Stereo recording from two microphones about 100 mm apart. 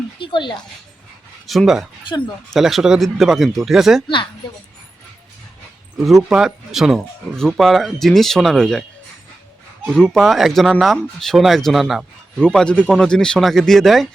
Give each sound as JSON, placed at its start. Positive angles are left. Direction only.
{"t": 0.2, "sound": "a sound", "side_deg": 55}
{"t": 1.5, "sound": "speech", "side_deg": 0}
{"t": 2.0, "sound": "speech", "side_deg": 50}
{"t": 2.5, "sound": "speech", "side_deg": 0}
{"t": 6.0, "sound": "speech", "side_deg": 0}
{"t": 9.8, "sound": "speech", "side_deg": 5}
{"t": 12.4, "sound": "a man's voice", "side_deg": 10}